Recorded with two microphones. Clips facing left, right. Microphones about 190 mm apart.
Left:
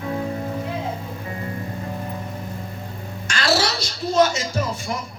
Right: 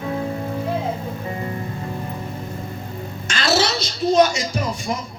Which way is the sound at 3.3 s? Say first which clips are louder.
Right 1 dB; 20° right (ahead or behind).